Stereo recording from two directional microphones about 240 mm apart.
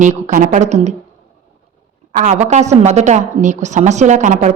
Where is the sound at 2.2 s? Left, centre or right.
Right.